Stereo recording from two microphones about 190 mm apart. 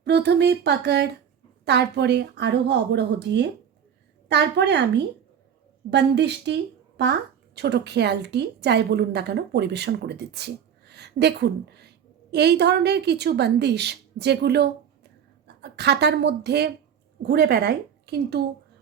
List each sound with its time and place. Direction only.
0.0 s speech: 60° right (ahead or behind)